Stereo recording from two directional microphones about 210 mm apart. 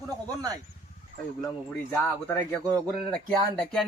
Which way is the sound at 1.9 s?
10° left (ahead or behind).